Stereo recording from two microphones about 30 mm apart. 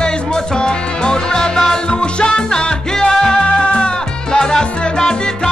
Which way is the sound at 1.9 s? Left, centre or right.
Left.